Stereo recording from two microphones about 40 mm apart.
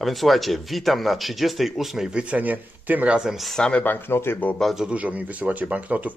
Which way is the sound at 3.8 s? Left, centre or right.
Left.